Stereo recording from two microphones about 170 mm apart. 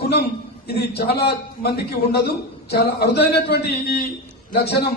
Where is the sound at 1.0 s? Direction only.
70° left (ahead or behind).